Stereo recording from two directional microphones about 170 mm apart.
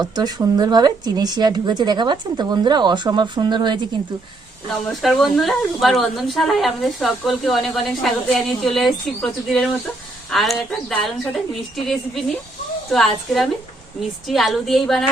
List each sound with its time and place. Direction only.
0.0 s a woman's voice: 25° right (ahead or behind)
4.9 s speech: centre (ahead or behind)
12.9 s speech: centre (ahead or behind)